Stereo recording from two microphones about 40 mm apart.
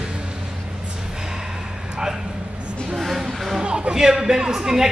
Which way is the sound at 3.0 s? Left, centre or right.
Centre.